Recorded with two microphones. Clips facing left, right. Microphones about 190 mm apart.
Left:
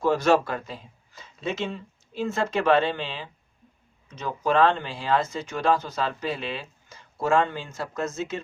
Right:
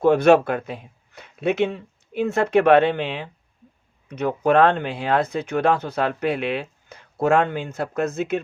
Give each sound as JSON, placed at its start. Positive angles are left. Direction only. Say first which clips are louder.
{"t": 0.0, "sound": "speech", "louder": "right 6 dB", "side_deg": -60}